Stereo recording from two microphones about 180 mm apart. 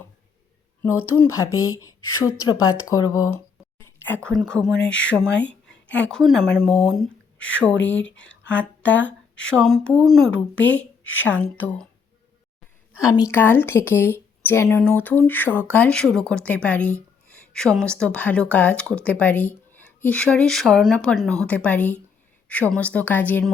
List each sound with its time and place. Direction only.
0.8 s speech: 15° left (ahead or behind)
3.8 s a sound: 10° left (ahead or behind)
4.3 s a woman's voice: 5° left (ahead or behind)
13.0 s speech: 20° left (ahead or behind)